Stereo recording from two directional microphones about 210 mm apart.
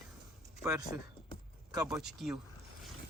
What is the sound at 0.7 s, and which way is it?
Speech, 15° right (ahead or behind).